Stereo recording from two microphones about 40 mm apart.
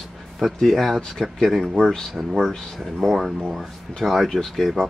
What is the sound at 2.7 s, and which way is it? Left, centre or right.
Speech, centre.